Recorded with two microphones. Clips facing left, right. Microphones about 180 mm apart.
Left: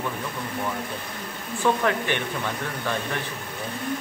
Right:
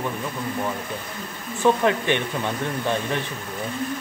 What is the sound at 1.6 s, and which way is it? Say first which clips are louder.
Speech: right 4 dB; 20° right (ahead or behind).